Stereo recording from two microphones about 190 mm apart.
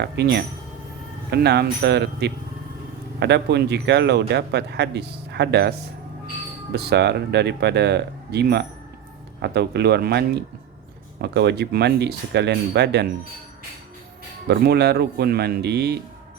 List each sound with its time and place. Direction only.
0.0 s a man's voice: 60° right (ahead or behind)
6.7 s a man's voice: 60° right (ahead or behind)
14.4 s a man's voice: 60° right (ahead or behind)